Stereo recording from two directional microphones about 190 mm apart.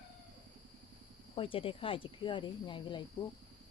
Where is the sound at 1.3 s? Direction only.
30° left (ahead or behind).